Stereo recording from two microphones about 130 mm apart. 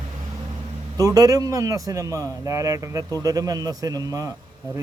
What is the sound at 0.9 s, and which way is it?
Speech, 25° right (ahead or behind).